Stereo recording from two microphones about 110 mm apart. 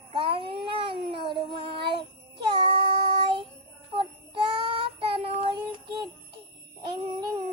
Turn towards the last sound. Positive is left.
turn(degrees=-40)  # may be behind; listen again after turning